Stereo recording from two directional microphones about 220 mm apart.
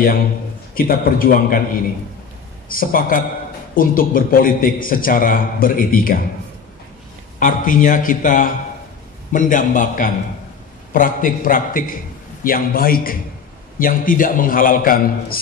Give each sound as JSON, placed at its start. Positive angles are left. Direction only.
{"t": 0.7, "sound": "a man's voice", "side_deg": 40}
{"t": 2.7, "sound": "a man's voice", "side_deg": 40}
{"t": 7.3, "sound": "a man's voice", "side_deg": 35}